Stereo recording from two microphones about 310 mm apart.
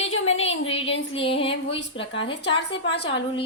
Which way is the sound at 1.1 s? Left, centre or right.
Centre.